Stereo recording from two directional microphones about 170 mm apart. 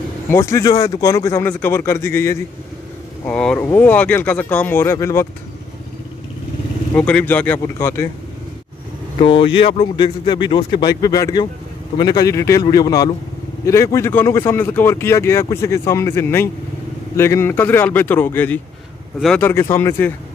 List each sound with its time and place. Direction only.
0.3 s speech: 15° left (ahead or behind)
3.3 s speech: 5° left (ahead or behind)
7.0 s speech: 10° left (ahead or behind)
9.2 s speech: 30° left (ahead or behind); by 19.4 s centre (ahead or behind)
19.4 s speech: 15° left (ahead or behind)